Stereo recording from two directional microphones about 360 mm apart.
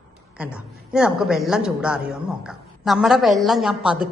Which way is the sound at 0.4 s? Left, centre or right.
Centre.